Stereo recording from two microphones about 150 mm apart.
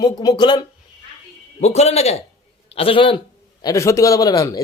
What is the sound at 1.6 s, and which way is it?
A man's voice, 45° left (ahead or behind).